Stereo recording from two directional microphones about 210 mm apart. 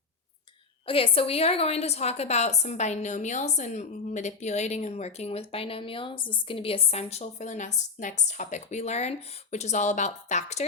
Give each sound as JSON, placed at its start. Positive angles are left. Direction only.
{"t": 0.9, "sound": "a woman's voice", "side_deg": 25}